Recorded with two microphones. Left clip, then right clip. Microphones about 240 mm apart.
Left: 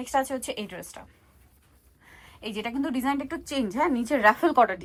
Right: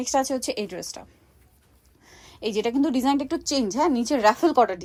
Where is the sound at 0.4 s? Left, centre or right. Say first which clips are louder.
Right 5 dB; right.